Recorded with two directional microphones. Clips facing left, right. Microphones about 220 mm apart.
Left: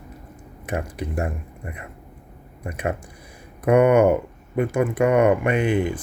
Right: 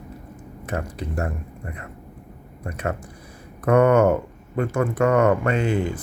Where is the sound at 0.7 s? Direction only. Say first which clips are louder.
Left 1 dB; 15° left (ahead or behind).